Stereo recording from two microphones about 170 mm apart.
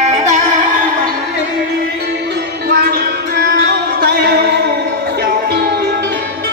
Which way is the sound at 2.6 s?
65° right (ahead or behind).